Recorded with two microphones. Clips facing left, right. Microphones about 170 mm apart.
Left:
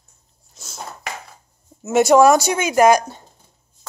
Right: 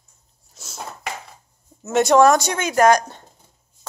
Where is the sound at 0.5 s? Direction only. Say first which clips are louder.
Even; 5° right (ahead or behind).